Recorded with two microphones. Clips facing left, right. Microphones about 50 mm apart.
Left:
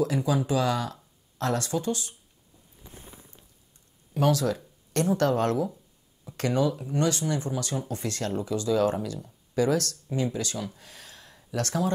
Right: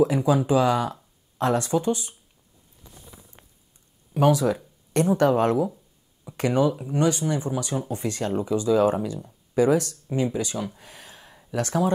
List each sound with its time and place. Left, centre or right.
0.0 s speech: centre
2.9 s a sound: left
4.1 s speech: centre